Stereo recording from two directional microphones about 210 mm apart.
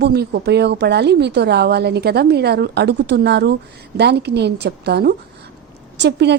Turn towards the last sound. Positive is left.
turn(degrees=-55)  # may be behind; listen again after turning